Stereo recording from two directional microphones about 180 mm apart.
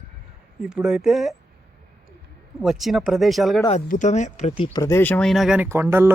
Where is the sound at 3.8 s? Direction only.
45° left (ahead or behind).